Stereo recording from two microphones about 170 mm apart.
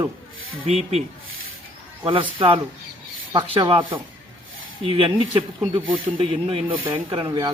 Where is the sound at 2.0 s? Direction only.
30° right (ahead or behind).